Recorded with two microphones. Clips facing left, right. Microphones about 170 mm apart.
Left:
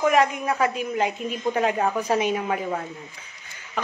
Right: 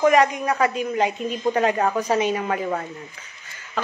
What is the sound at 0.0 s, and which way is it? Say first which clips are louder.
Speech: right 3 dB; 5° left (ahead or behind).